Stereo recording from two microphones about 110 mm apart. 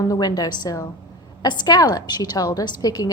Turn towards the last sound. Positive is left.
turn(degrees=35)  # may be behind; listen again after turning